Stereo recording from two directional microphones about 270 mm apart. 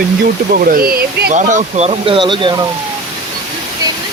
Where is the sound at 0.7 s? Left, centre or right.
Right; by 2.5 s centre.